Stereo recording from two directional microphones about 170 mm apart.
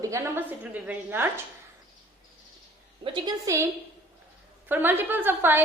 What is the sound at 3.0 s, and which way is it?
Speech, 25° right (ahead or behind).